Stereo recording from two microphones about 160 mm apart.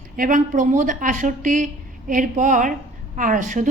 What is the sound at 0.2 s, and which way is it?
A woman's voice, 55° right (ahead or behind).